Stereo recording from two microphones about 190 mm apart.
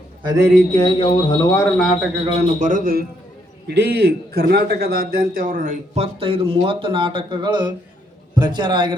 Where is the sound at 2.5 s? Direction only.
45° right (ahead or behind).